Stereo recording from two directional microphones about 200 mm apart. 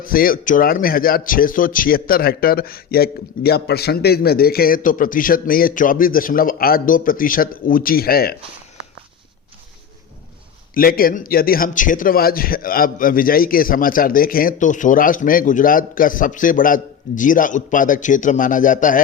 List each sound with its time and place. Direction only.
0.0 s a man's voice: 45° left (ahead or behind)
10.8 s a man's voice: 45° left (ahead or behind)